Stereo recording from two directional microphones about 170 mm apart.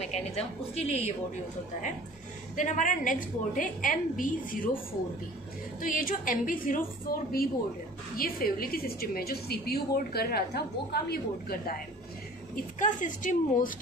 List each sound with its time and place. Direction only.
0.0 s a woman's voice: 40° left (ahead or behind)
2.5 s a woman's voice: 50° left (ahead or behind)
5.8 s a woman's voice: 50° left (ahead or behind)
7.1 s a woman's voice: 65° left (ahead or behind)
12.7 s a woman's voice: 50° left (ahead or behind)